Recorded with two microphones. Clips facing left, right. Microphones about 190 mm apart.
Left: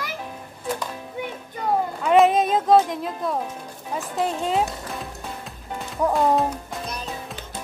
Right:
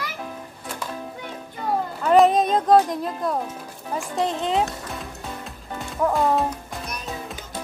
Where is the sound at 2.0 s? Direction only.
Centre (ahead or behind).